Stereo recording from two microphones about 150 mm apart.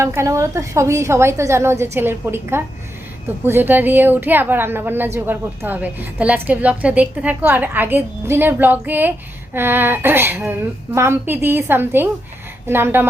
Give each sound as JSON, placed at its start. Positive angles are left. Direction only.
{"t": 0.0, "sound": "a woman's voice", "side_deg": -20}